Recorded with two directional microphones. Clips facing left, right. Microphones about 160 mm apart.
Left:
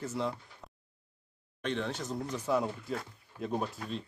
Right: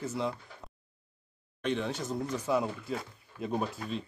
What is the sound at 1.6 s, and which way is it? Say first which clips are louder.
Speech: right 2 dB; 5° right (ahead or behind).